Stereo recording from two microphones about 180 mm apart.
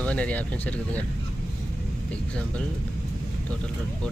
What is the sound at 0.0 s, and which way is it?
Speech, 5° left (ahead or behind).